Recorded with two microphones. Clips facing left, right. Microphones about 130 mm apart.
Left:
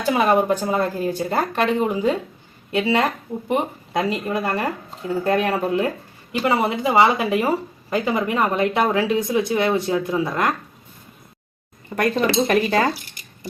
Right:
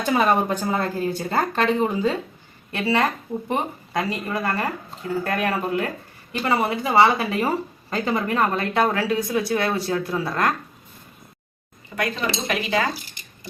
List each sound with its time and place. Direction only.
0.0 s speech: 10° left (ahead or behind)
11.9 s speech: 45° left (ahead or behind)